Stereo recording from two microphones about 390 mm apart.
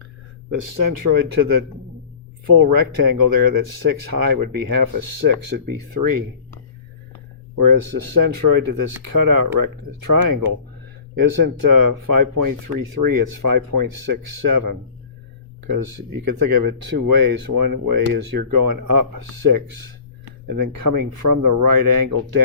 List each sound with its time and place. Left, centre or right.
0.5 s speech: right
2.6 s speech: right
7.5 s speech: right